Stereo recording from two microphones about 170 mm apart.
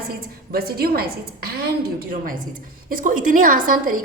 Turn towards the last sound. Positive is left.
turn(degrees=-55)  # may be behind; listen again after turning